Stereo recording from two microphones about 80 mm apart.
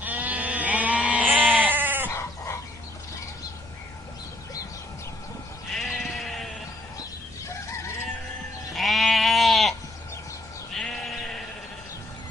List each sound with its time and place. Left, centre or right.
0.0 s sheep: right
5.8 s bleat: centre
8.7 s goat: centre
10.7 s sheep: centre